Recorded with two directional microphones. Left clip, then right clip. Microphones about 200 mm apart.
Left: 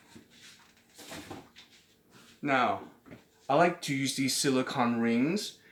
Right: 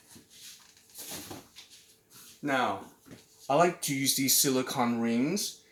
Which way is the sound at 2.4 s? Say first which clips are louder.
Left 2 dB; centre (ahead or behind).